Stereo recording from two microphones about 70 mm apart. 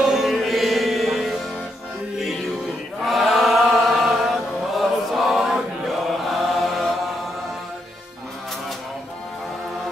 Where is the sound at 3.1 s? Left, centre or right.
Centre.